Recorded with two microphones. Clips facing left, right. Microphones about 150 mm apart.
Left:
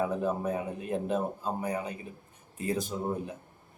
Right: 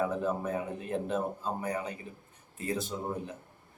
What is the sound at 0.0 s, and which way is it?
Speech, 15° left (ahead or behind).